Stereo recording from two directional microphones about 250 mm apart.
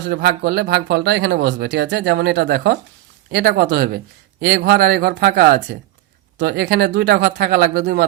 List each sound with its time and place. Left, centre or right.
0.1 s speech: right